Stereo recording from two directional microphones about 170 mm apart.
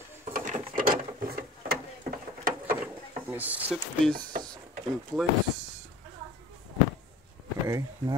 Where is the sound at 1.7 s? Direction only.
60° right (ahead or behind).